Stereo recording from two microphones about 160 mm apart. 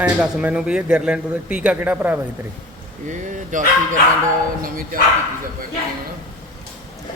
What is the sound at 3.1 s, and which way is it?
A man's voice, 50° right (ahead or behind).